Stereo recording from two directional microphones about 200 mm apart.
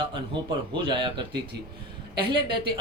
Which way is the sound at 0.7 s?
25° right (ahead or behind).